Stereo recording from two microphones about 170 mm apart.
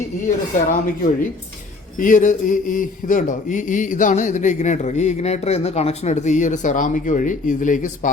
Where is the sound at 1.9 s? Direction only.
50° left (ahead or behind).